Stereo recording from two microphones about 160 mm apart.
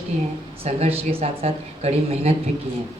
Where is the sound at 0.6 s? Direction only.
40° right (ahead or behind).